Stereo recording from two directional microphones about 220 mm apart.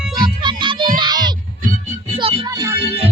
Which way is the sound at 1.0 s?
20° right (ahead or behind).